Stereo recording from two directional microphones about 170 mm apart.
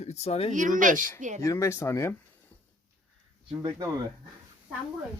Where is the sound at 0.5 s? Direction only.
50° right (ahead or behind).